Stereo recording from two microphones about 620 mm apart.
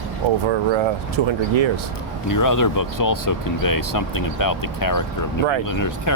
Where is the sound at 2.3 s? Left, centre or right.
Left.